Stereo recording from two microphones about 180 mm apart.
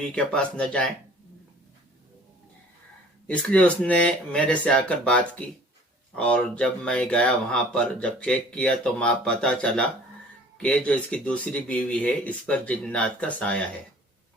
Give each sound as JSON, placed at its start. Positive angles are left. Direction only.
{"t": 0.0, "sound": "speech", "side_deg": 5}
{"t": 3.2, "sound": "speech", "side_deg": 5}